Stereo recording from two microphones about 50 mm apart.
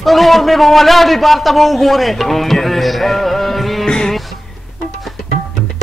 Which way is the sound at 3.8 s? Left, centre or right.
Centre.